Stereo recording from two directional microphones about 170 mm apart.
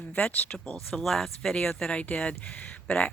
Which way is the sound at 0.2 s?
5° left (ahead or behind).